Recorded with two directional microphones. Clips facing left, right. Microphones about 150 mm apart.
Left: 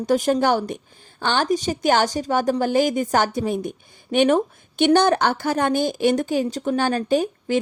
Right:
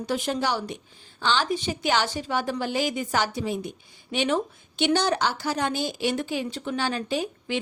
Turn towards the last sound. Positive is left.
turn(degrees=45)  # may be behind; listen again after turning